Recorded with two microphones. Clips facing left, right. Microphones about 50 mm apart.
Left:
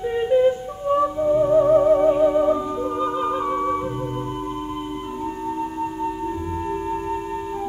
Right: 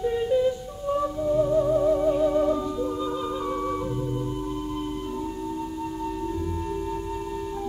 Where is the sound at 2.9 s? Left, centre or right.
Left.